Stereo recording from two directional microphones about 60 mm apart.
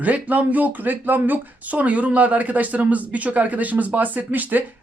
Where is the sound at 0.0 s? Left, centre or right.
Right.